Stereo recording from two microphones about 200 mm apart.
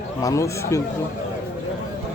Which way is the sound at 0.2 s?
15° left (ahead or behind).